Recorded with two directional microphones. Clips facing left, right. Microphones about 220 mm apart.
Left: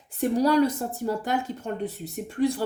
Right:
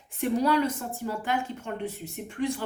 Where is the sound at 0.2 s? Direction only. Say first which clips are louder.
Left 4 dB; 40° left (ahead or behind).